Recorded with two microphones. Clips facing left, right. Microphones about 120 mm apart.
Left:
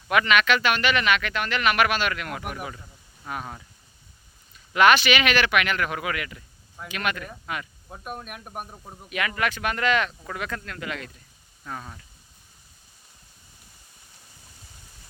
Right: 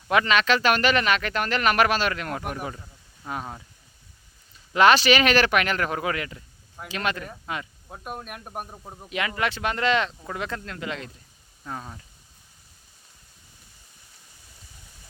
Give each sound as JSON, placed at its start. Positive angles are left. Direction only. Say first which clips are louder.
{"t": 0.1, "sound": "speech", "louder": "even", "side_deg": -30}
{"t": 3.2, "sound": "speech", "louder": "right 1 dB", "side_deg": -20}
{"t": 4.7, "sound": "speech", "louder": "right 1 dB", "side_deg": -30}
{"t": 7.9, "sound": "speech", "louder": "even", "side_deg": -5}
{"t": 8.7, "sound": "speech", "louder": "right 2 dB", "side_deg": -15}
{"t": 9.0, "sound": "speech", "louder": "even", "side_deg": -25}